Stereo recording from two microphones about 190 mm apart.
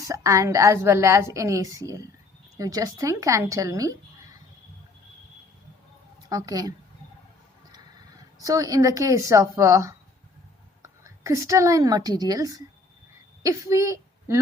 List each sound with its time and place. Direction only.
0.1 s a woman's voice: 15° right (ahead or behind)
6.2 s a woman's voice: 20° right (ahead or behind)
8.4 s a woman's voice: 20° right (ahead or behind)